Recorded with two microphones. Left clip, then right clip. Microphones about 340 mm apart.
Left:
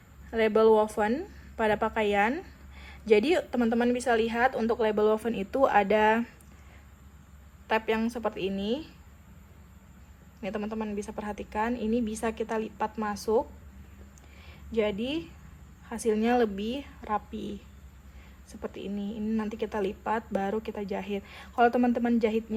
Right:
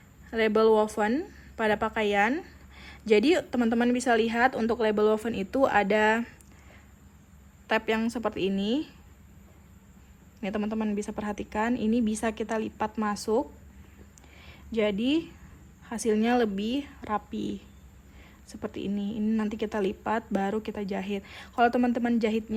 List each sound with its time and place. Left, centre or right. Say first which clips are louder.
0.3 s a woman's voice: even; right
7.7 s a woman's voice: right 1 dB; right
10.4 s a woman's voice: right 2 dB; centre
14.4 s a woman's voice: right 1 dB; right